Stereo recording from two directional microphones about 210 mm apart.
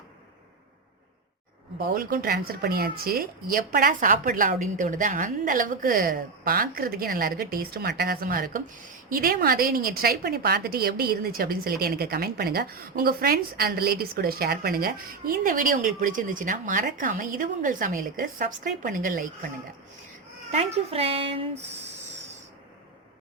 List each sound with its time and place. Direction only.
1.9 s a woman's voice: 40° right (ahead or behind)
20.5 s speech: 30° right (ahead or behind)